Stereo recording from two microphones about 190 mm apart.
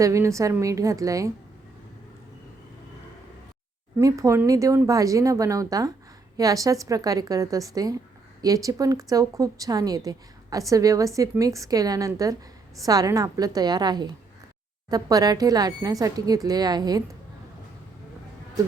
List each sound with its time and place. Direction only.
0.0 s a woman's voice: 15° right (ahead or behind)
3.9 s a woman's voice: 15° right (ahead or behind)